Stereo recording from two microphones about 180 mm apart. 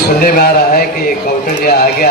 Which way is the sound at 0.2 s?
55° left (ahead or behind).